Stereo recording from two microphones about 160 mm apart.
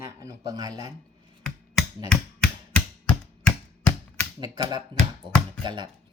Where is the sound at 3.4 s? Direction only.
10° left (ahead or behind).